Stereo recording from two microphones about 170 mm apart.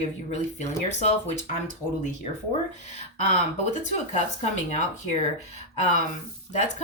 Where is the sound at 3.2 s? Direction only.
40° left (ahead or behind).